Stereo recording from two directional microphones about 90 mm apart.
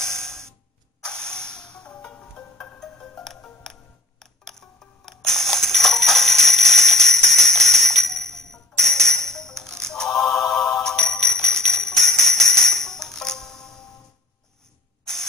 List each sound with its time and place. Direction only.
1.0 s music: 10° left (ahead or behind)
10.7 s jingle bell: 5° left (ahead or behind)